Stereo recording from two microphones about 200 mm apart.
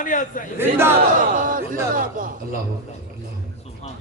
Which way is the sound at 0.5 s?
10° right (ahead or behind).